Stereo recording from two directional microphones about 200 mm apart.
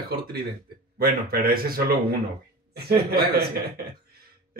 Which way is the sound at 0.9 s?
50° right (ahead or behind).